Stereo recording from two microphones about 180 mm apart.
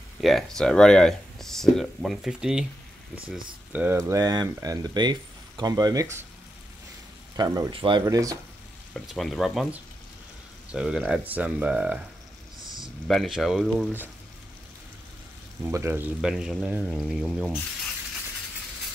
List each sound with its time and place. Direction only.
0.2 s speech: centre (ahead or behind)
3.7 s speech: 10° right (ahead or behind)
7.3 s speech: 20° right (ahead or behind)
8.9 s speech: centre (ahead or behind)
13.1 s speech: centre (ahead or behind)
15.7 s speech: 15° right (ahead or behind)